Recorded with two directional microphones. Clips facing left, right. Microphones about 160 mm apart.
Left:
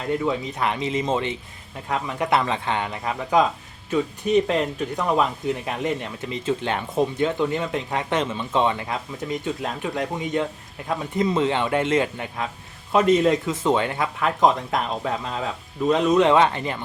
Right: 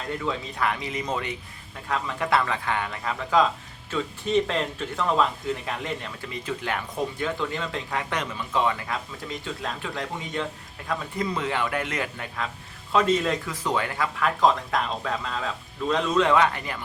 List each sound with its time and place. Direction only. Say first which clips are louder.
0.2 s speech: left 4 dB; 20° left (ahead or behind)